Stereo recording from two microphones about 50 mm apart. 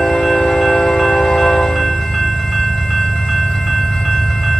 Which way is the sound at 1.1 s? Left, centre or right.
Centre.